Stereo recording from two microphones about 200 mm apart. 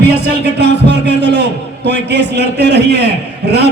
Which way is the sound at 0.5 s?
60° right (ahead or behind).